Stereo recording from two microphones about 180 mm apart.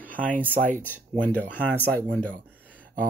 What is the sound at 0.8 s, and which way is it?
Speech, 10° left (ahead or behind).